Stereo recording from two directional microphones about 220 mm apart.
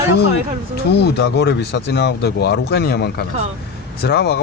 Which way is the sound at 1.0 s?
50° left (ahead or behind).